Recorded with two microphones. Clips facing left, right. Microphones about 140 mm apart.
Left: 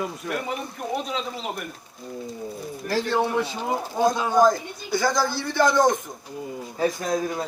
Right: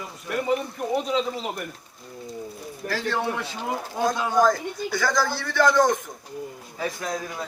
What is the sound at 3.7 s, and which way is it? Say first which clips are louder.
Speech: left 2 dB; 25° left (ahead or behind).